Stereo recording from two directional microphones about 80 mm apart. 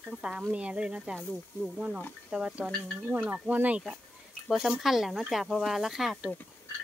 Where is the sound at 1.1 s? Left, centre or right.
Centre.